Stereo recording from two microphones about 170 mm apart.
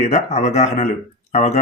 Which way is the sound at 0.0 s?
40° left (ahead or behind).